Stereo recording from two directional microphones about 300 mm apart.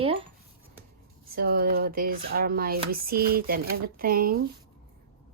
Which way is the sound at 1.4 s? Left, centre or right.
Right.